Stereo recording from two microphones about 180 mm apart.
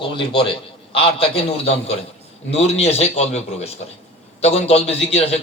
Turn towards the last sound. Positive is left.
turn(degrees=35)  # may be behind; listen again after turning